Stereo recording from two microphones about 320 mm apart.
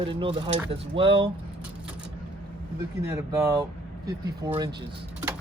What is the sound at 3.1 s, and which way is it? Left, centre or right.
Speech, centre.